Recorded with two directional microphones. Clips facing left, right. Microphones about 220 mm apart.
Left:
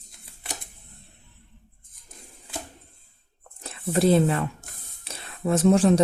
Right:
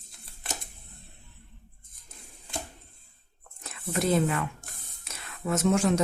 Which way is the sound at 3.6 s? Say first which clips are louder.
Left 7 dB; 30° left (ahead or behind).